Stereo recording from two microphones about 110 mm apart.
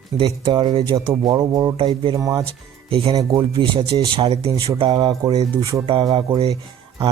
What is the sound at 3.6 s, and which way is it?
Speech, 50° right (ahead or behind).